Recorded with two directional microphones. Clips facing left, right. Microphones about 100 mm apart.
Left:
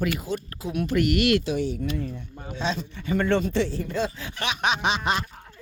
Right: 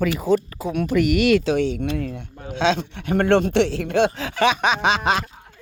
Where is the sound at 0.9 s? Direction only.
90° right; by 2.2 s 65° right (ahead or behind).